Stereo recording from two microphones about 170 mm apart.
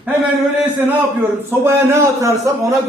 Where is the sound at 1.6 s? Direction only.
15° right (ahead or behind).